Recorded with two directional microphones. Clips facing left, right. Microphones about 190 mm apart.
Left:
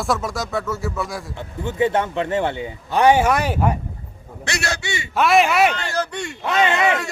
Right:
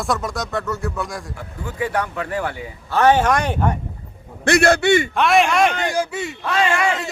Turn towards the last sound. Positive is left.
turn(degrees=20)  # may be behind; listen again after turning